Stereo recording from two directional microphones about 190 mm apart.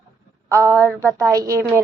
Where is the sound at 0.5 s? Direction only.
15° right (ahead or behind).